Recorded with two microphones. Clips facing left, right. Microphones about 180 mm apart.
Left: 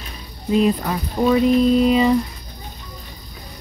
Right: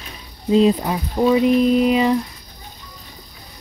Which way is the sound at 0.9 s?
10° right (ahead or behind).